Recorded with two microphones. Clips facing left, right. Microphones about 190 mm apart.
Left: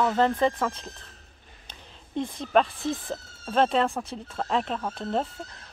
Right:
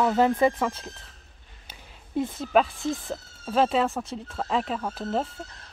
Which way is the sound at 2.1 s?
5° right (ahead or behind).